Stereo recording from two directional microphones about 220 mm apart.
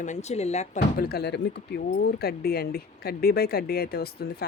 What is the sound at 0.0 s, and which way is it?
Speech, 30° left (ahead or behind).